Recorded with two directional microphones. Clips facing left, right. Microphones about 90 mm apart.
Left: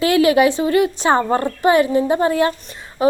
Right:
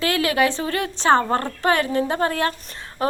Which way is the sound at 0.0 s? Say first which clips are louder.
Left 7 dB; 15° left (ahead or behind).